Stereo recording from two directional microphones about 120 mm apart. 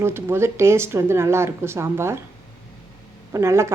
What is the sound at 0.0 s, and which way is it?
A woman's voice, 20° right (ahead or behind).